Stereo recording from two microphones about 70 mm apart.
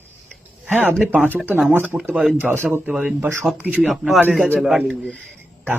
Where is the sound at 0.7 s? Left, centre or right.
Right.